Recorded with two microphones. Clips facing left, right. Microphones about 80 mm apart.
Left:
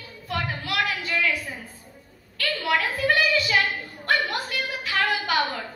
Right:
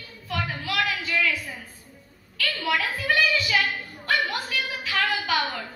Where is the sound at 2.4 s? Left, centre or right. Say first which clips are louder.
Left 1 dB; left.